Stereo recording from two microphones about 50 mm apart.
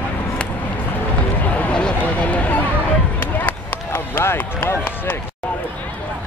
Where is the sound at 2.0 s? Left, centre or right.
Left.